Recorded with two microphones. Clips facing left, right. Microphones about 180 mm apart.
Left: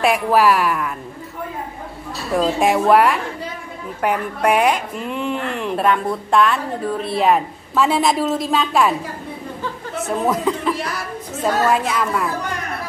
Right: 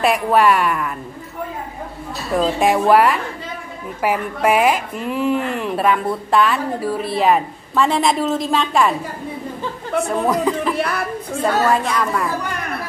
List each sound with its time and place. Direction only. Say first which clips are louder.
0.0 s speech: even; centre (ahead or behind)
2.3 s speech: even; centre (ahead or behind)
10.0 s speech: left 1 dB; centre (ahead or behind)
10.8 s a sound: right 5 dB; 60° right (ahead or behind)
11.4 s speech: even; 5° left (ahead or behind)